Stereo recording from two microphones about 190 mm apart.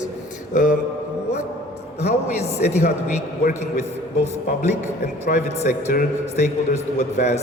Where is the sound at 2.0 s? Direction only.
35° left (ahead or behind).